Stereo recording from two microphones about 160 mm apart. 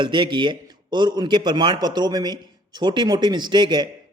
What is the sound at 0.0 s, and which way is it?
A man's voice, 30° right (ahead or behind).